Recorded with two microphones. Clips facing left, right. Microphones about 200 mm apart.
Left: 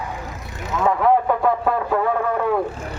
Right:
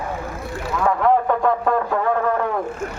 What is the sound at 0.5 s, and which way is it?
Vehicle, 20° left (ahead or behind).